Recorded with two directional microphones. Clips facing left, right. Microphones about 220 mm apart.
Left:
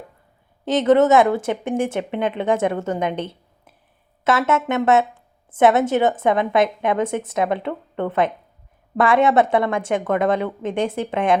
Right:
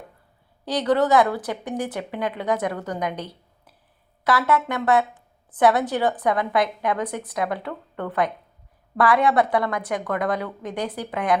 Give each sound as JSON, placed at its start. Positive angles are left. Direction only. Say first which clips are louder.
{"t": 0.6, "sound": "speech", "louder": "left 6 dB", "side_deg": 25}